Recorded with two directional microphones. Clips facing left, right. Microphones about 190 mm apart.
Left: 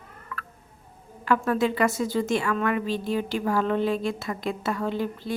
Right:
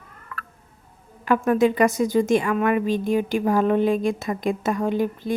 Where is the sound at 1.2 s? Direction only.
15° right (ahead or behind).